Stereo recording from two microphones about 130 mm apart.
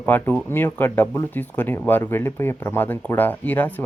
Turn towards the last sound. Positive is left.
turn(degrees=15)  # may be behind; listen again after turning